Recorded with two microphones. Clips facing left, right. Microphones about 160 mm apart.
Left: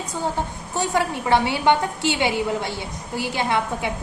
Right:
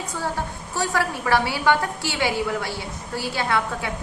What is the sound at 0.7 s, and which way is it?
A woman's voice, 20° left (ahead or behind).